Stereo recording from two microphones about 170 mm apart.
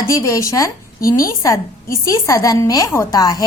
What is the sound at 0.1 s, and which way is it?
A woman's voice, 15° left (ahead or behind).